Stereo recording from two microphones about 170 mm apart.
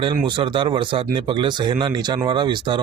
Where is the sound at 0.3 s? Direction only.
30° right (ahead or behind).